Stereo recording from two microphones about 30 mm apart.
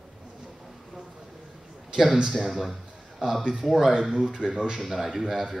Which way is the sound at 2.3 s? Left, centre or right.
Centre.